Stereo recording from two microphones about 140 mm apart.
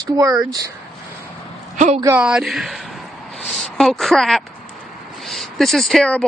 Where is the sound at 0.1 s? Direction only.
25° right (ahead or behind).